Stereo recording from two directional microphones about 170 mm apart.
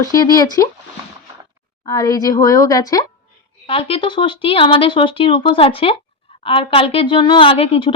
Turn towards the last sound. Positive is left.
turn(degrees=35)  # may be behind; listen again after turning